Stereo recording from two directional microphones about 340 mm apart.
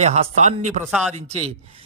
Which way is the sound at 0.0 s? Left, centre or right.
Centre.